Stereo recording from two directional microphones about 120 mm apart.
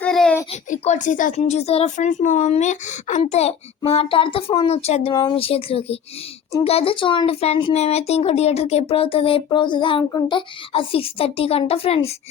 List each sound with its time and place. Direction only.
0.0 s a sound: 5° left (ahead or behind)
0.5 s speech: 80° left
3.8 s speech: 50° left (ahead or behind)
5.1 s speech: 35° left (ahead or behind)
5.4 s a child's voice: 50° left (ahead or behind)
10.0 s a child's voice: 30° left (ahead or behind); by 12.1 s 55° left (ahead or behind)